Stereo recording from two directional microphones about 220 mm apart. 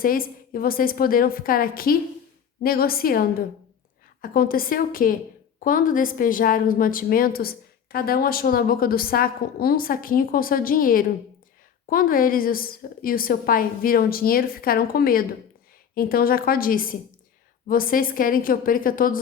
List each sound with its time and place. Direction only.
0.0 s a woman's voice: 40° left (ahead or behind)